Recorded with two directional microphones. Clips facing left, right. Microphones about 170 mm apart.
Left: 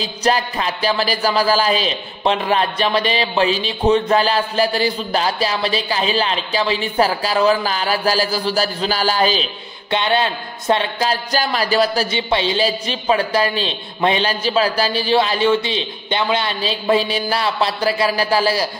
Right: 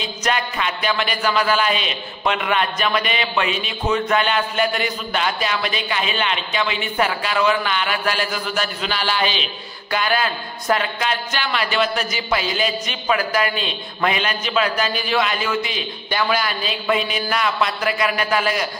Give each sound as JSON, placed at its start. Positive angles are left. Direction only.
{"t": 0.0, "sound": "speech", "side_deg": 35}
{"t": 9.8, "sound": "speech", "side_deg": 25}